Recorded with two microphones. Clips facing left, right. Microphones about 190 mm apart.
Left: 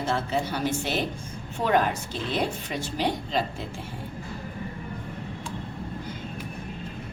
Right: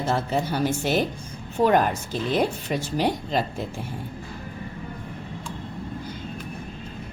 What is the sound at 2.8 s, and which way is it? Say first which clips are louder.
Speech: right 2 dB; 45° right (ahead or behind).